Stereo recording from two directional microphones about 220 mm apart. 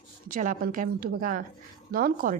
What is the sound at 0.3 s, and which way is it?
A woman's voice, 35° right (ahead or behind).